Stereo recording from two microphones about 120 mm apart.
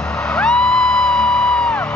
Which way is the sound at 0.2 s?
10° left (ahead or behind).